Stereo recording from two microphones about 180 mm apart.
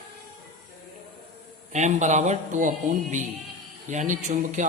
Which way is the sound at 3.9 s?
45° right (ahead or behind).